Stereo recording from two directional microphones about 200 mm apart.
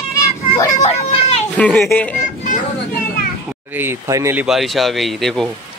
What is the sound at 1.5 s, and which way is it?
Speech, 5° left (ahead or behind).